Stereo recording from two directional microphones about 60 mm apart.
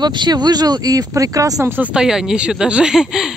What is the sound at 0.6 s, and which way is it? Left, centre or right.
Speech, right.